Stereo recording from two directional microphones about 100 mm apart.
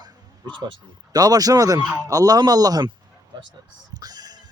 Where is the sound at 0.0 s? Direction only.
50° right (ahead or behind).